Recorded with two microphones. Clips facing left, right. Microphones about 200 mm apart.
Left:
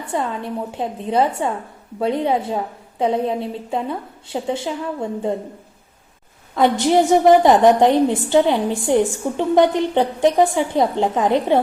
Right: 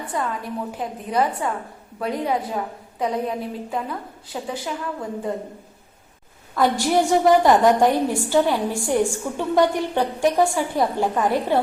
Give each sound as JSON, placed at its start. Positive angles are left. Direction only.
{"t": 0.1, "sound": "a woman's voice", "side_deg": 25}
{"t": 6.6, "sound": "a woman's voice", "side_deg": 20}